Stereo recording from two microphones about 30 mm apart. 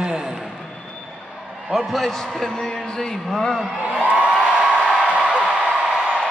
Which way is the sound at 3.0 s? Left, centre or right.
Centre.